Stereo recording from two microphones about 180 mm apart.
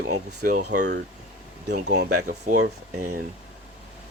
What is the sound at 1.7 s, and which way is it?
Speech, 70° right (ahead or behind).